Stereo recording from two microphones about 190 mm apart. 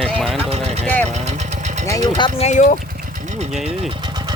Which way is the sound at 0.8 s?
10° left (ahead or behind).